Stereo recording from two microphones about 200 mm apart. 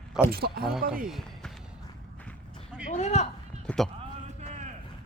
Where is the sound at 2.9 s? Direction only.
35° left (ahead or behind).